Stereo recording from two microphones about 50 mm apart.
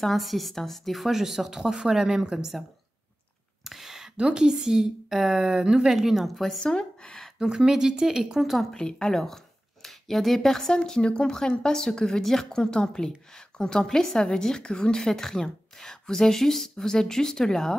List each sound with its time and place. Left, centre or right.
0.0 s speech: centre
3.6 s a sound: centre
4.2 s a woman's voice: centre
5.6 s a woman's voice: centre
5.9 s speech: centre
6.7 s a sound: centre
7.3 s a woman's voice: centre
8.7 s speech: centre
10.8 s a woman's voice: centre